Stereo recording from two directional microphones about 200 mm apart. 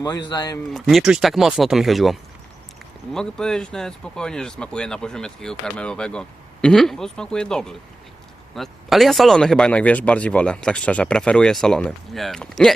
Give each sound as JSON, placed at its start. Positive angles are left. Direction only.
{"t": 0.0, "sound": "speech", "side_deg": 20}
{"t": 0.7, "sound": "speech", "side_deg": 0}